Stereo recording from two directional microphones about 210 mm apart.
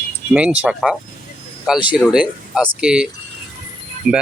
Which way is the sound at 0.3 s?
5° right (ahead or behind).